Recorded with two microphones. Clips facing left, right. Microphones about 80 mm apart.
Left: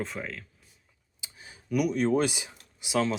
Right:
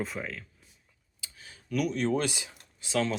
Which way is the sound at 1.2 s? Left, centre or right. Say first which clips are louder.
Left 1 dB; left.